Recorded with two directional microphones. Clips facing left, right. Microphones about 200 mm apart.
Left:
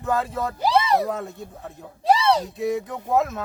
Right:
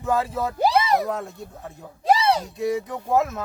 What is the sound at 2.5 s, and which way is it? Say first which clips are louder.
Speech: even; centre (ahead or behind).